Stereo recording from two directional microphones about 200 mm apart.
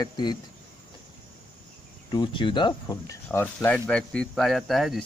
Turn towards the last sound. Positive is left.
turn(degrees=0)  # may be behind; listen again after turning